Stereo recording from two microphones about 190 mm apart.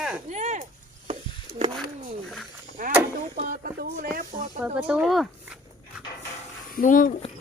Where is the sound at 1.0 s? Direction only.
30° right (ahead or behind).